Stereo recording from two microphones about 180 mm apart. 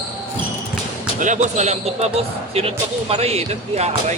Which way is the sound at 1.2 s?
40° right (ahead or behind).